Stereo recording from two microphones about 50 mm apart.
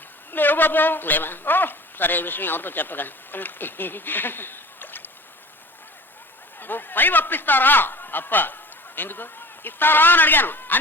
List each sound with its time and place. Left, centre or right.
0.3 s a woman's voice: left
6.6 s a man's voice: left